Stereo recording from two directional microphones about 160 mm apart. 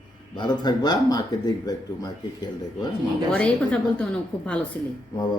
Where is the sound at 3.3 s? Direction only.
10° left (ahead or behind).